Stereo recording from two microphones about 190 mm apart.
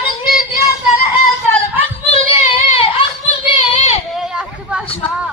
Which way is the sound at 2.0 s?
30° left (ahead or behind).